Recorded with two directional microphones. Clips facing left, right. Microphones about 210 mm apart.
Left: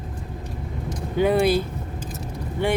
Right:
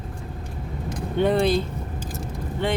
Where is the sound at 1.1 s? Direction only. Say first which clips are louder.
Left 1 dB; 5° left (ahead or behind).